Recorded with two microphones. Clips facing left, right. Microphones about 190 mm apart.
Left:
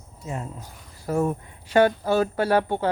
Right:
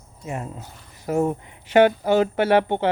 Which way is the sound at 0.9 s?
20° right (ahead or behind).